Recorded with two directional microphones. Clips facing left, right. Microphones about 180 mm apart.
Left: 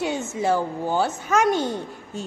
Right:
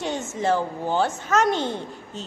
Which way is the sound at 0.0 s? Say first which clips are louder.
Left 1 dB; 10° left (ahead or behind).